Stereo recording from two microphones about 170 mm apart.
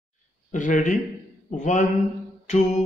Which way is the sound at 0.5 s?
50° left (ahead or behind).